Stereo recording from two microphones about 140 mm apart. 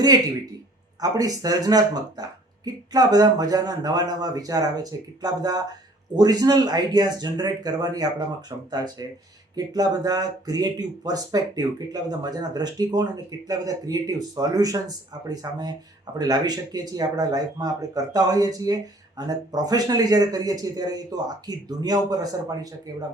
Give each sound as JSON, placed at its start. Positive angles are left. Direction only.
{"t": 1.0, "sound": "speech", "side_deg": -25}